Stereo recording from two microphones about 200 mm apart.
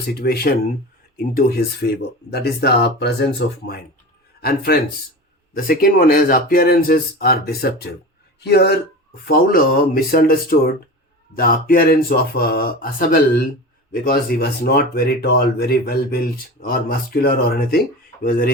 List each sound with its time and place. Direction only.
0.1 s speech: 50° left (ahead or behind)